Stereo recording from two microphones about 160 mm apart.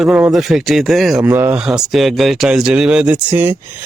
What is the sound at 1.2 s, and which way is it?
Speech, 15° right (ahead or behind).